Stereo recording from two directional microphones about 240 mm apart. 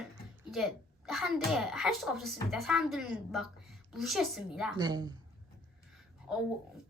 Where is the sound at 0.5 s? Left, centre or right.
Centre.